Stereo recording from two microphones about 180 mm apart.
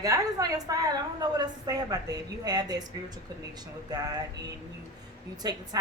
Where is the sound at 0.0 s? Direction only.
20° right (ahead or behind).